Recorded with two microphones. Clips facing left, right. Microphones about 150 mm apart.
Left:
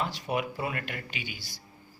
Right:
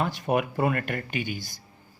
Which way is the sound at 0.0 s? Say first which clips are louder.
Right 5 dB; 50° right (ahead or behind).